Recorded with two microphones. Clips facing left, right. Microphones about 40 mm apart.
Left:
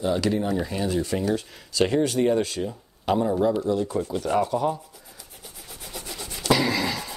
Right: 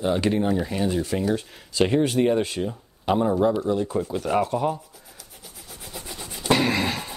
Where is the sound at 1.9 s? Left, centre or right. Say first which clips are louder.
Right 1 dB; centre.